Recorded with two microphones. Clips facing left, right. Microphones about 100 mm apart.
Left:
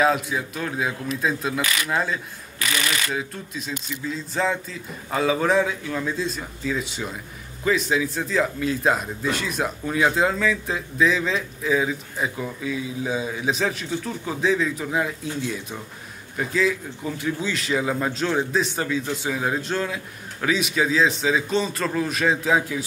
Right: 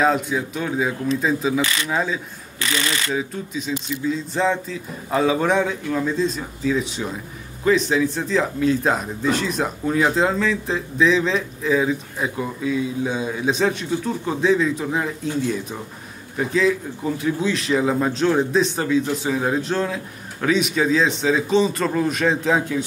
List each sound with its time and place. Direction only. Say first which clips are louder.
0.0 s speech: right 2 dB; centre (ahead or behind)
1.6 s speech: right 3 dB; 30° right (ahead or behind)
1.9 s speech: right 2 dB; centre (ahead or behind)
2.6 s speech: right 2 dB; 30° right (ahead or behind)
3.2 s speech: right 5 dB; centre (ahead or behind)